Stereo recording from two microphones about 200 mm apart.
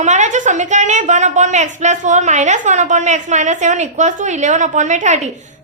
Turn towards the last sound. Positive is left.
turn(degrees=-35)  # may be behind; listen again after turning